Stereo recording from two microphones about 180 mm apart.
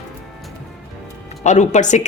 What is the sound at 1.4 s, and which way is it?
Speech, 40° left (ahead or behind).